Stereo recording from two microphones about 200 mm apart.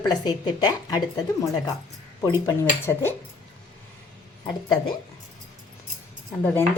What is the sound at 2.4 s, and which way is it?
Speech, 15° left (ahead or behind).